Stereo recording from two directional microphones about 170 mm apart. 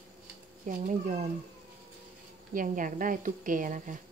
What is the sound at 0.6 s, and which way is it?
Speech, 50° right (ahead or behind).